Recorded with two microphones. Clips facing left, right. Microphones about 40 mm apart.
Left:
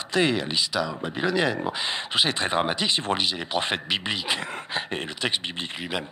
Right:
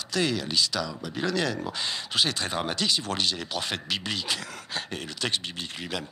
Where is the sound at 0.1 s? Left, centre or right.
Left.